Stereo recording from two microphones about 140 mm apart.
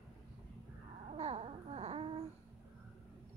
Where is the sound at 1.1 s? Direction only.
45° right (ahead or behind).